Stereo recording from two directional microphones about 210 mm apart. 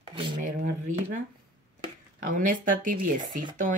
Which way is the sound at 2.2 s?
40° right (ahead or behind).